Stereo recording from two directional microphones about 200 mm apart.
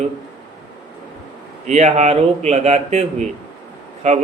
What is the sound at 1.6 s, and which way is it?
Speech, 35° right (ahead or behind).